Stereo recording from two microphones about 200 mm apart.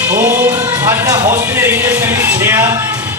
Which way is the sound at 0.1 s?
10° right (ahead or behind).